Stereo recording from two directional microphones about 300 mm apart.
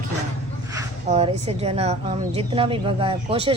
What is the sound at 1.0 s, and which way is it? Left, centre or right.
A woman's voice, right.